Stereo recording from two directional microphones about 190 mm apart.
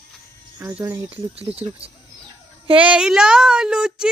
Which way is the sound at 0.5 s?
15° right (ahead or behind).